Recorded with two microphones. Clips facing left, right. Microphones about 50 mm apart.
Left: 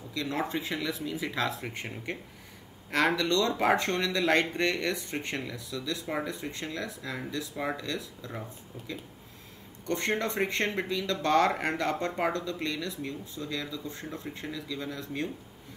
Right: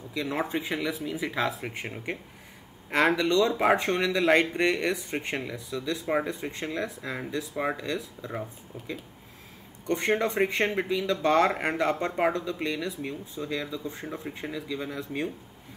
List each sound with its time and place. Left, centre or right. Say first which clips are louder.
0.1 s speech: right 2 dB; centre